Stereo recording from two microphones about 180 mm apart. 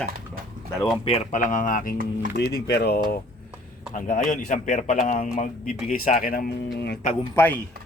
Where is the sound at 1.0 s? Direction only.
40° left (ahead or behind).